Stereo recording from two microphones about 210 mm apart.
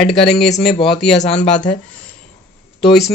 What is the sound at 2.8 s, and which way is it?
Speech, centre (ahead or behind).